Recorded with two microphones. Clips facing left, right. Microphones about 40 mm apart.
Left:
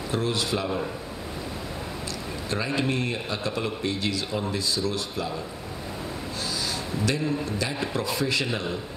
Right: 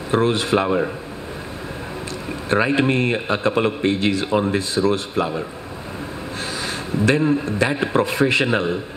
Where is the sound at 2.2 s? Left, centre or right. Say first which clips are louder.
Right 11 dB; right.